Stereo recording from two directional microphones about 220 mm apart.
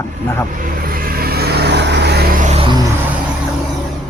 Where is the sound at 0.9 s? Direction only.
40° right (ahead or behind).